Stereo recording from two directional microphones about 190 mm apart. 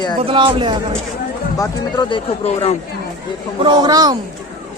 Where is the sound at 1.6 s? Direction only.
25° left (ahead or behind).